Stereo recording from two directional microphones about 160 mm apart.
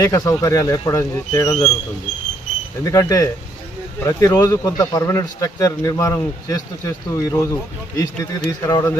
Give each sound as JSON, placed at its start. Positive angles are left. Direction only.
{"t": 0.0, "sound": "speech", "side_deg": 20}
{"t": 2.8, "sound": "speech", "side_deg": 20}